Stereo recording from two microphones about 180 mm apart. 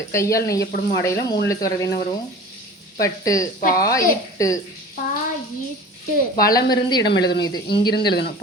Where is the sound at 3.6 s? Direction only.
50° left (ahead or behind).